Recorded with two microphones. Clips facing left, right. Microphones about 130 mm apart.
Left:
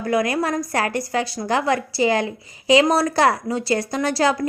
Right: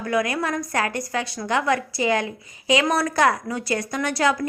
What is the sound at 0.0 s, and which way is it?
A woman's voice, 35° left (ahead or behind).